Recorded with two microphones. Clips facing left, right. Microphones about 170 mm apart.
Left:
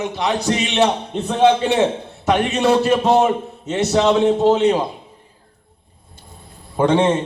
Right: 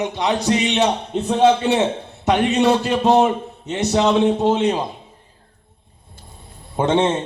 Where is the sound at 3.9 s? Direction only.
20° right (ahead or behind).